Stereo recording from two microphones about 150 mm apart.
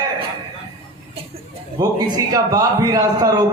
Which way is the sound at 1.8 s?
25° right (ahead or behind).